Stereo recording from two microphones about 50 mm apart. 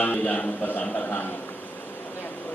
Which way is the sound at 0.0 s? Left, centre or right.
Left.